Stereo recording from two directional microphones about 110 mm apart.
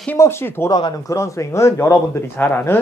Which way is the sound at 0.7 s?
40° left (ahead or behind).